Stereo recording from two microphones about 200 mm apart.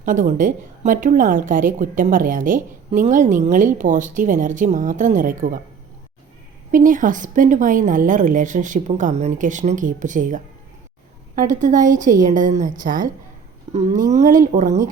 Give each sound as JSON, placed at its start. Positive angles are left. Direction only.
{"t": 0.0, "sound": "a woman's voice", "side_deg": -40}
{"t": 6.7, "sound": "a woman's voice", "side_deg": -40}